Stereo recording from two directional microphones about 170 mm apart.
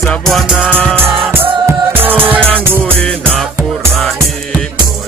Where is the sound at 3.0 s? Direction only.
5° left (ahead or behind).